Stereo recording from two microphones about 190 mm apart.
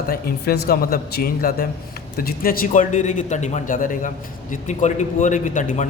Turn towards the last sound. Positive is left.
turn(degrees=40)  # may be behind; listen again after turning